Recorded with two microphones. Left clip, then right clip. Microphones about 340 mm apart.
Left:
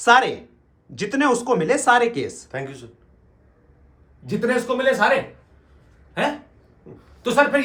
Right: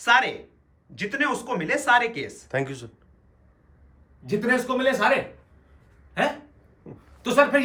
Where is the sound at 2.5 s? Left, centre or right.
Right.